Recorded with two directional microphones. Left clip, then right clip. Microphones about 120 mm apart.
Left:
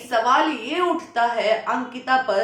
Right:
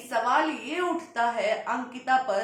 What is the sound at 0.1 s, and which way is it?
A woman's voice, 20° left (ahead or behind).